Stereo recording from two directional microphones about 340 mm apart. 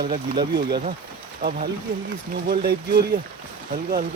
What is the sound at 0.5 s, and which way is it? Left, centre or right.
Speech, right.